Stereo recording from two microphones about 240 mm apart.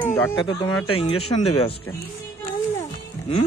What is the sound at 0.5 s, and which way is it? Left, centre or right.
Speech, left.